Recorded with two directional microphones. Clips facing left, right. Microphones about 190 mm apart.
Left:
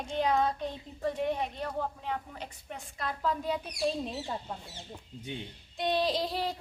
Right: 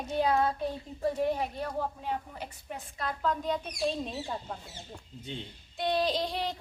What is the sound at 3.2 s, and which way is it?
Speech, 5° left (ahead or behind).